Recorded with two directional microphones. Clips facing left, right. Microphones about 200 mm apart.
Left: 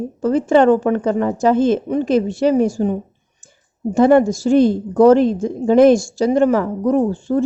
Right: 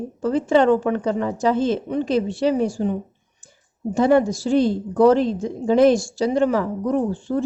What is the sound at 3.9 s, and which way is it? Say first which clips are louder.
A woman's voice: left 5 dB; 50° left (ahead or behind).